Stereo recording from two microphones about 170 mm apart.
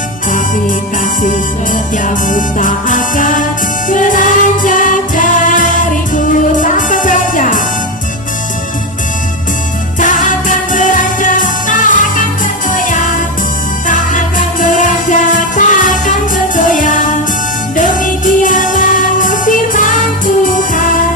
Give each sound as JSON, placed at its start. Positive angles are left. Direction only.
{"t": 0.3, "sound": "music", "side_deg": 50}
{"t": 10.0, "sound": "music", "side_deg": 50}